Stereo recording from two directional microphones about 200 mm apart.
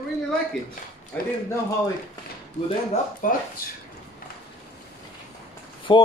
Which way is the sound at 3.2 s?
40° left (ahead or behind).